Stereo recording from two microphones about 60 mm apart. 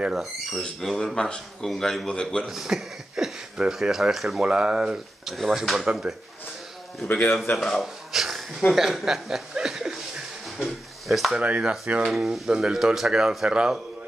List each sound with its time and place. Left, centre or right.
0.0 s speech: centre
0.6 s speech: centre
2.4 s speech: centre
4.4 s speech: centre
7.1 s a man's voice: left
7.8 s a sound: centre
8.7 s speech: centre
10.6 s a sound: centre
11.3 s speech: centre
12.0 s speech: centre
13.5 s speech: centre